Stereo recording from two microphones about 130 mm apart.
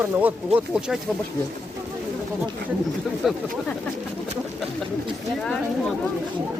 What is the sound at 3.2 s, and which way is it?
Speech, centre (ahead or behind).